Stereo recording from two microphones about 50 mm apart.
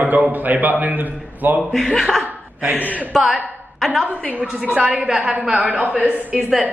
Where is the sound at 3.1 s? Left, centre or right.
Centre.